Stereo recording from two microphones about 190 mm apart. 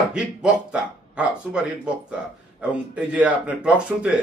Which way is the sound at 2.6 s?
5° right (ahead or behind).